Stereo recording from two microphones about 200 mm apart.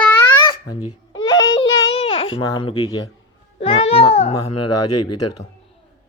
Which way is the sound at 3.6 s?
30° left (ahead or behind).